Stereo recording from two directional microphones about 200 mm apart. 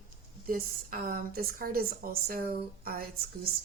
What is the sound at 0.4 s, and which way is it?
Speech, 45° right (ahead or behind).